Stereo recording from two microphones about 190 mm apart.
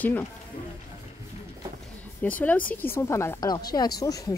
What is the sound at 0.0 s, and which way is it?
Speech, 10° left (ahead or behind).